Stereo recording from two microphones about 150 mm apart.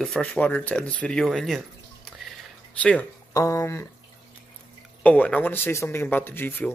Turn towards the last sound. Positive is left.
turn(degrees=15)  # may be behind; listen again after turning